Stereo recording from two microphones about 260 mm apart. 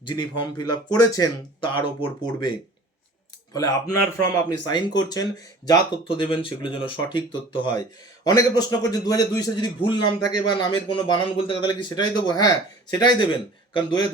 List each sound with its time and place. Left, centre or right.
0.0 s speech: centre